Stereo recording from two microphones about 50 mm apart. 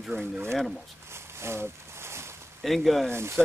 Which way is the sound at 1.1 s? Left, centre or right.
Right.